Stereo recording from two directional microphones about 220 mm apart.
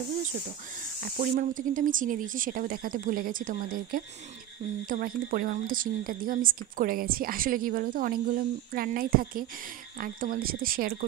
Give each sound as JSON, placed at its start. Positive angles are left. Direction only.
{"t": 1.0, "sound": "a woman's voice", "side_deg": -45}